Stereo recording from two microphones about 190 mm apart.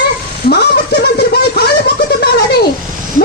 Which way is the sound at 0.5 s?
60° left (ahead or behind).